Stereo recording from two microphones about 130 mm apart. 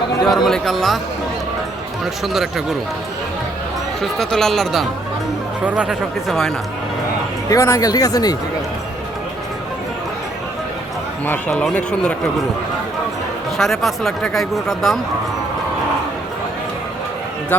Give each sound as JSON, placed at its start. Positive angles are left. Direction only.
{"t": 0.3, "sound": "speech", "side_deg": 0}
{"t": 2.2, "sound": "speech", "side_deg": -5}
{"t": 4.0, "sound": "speech", "side_deg": 5}
{"t": 5.6, "sound": "speech", "side_deg": -10}
{"t": 7.5, "sound": "speech", "side_deg": 25}
{"t": 11.5, "sound": "speech", "side_deg": 5}
{"t": 13.6, "sound": "speech", "side_deg": 0}
{"t": 17.5, "sound": "speech", "side_deg": 15}